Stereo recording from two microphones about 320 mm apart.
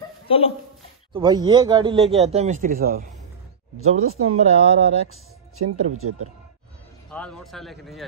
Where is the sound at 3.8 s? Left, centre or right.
Right.